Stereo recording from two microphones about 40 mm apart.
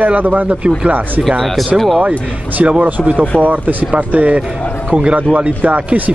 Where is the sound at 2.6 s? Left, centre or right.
Right.